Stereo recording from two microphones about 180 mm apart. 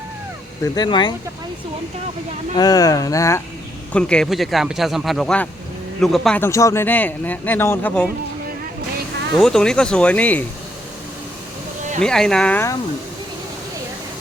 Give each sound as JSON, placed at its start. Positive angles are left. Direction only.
{"t": 0.6, "sound": "speech", "side_deg": 25}
{"t": 2.6, "sound": "speech", "side_deg": 20}
{"t": 3.9, "sound": "speech", "side_deg": 5}
{"t": 9.4, "sound": "speech", "side_deg": 5}
{"t": 11.9, "sound": "speech", "side_deg": 5}